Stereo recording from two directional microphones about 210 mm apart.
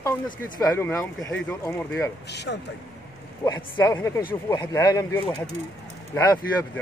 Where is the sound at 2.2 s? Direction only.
55° left (ahead or behind).